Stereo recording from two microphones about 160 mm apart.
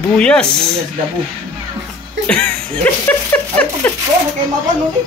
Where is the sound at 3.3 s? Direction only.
10° left (ahead or behind).